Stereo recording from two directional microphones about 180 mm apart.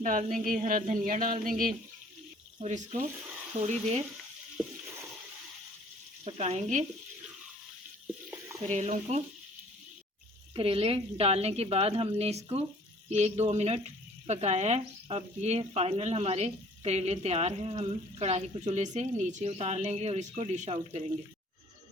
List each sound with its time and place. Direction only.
0.0 s speech: 45° right (ahead or behind)
6.2 s speech: 35° right (ahead or behind)
8.3 s stir: 15° right (ahead or behind)
8.6 s speech: 40° right (ahead or behind)
10.5 s speech: 30° right (ahead or behind)